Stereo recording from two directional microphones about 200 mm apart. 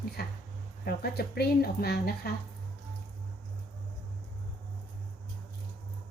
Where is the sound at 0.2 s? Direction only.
50° left (ahead or behind).